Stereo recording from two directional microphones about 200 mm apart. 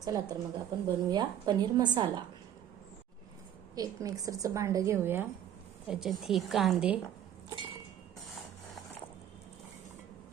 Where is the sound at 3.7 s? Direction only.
20° right (ahead or behind); by 6.9 s centre (ahead or behind).